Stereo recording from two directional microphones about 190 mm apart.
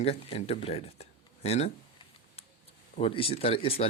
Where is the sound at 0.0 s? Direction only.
30° left (ahead or behind).